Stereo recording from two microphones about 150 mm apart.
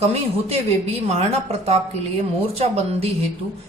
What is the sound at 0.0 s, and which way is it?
A woman's voice, 45° right (ahead or behind).